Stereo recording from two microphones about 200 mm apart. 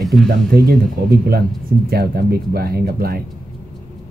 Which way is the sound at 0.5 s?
50° right (ahead or behind).